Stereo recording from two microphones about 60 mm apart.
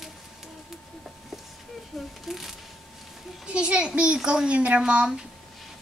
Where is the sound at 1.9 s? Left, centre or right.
Centre.